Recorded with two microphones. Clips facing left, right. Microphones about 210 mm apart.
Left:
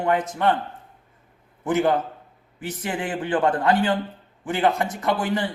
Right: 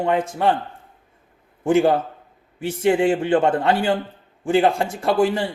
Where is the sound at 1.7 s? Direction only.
30° right (ahead or behind).